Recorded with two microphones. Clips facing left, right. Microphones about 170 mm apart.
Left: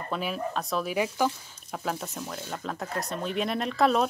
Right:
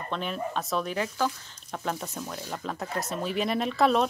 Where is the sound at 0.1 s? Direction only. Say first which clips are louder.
Left 1 dB; 5° left (ahead or behind).